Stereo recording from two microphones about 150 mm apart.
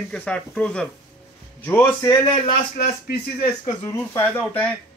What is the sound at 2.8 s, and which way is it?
Speech, 80° left.